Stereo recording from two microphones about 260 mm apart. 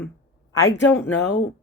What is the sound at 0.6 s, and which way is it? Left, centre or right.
Speech, centre.